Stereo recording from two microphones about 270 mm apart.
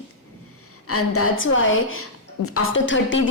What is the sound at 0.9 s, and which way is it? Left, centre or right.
A woman's voice, left.